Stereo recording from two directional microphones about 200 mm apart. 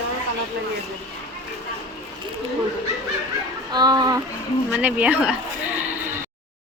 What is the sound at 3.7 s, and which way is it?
Speech, 20° right (ahead or behind).